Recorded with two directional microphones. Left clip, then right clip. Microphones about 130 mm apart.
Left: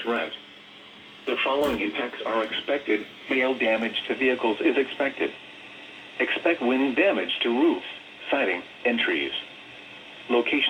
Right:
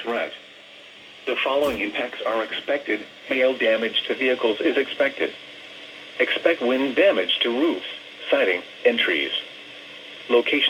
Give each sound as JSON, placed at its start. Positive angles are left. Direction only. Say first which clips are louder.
{"t": 0.0, "sound": "a sound", "louder": "right 1 dB", "side_deg": -20}
{"t": 1.2, "sound": "speech", "louder": "right 2 dB", "side_deg": -30}
{"t": 2.2, "sound": "speech", "louder": "right 1 dB", "side_deg": -20}